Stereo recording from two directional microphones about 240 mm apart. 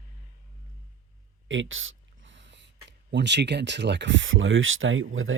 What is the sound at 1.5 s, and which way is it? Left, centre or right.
Speech, right.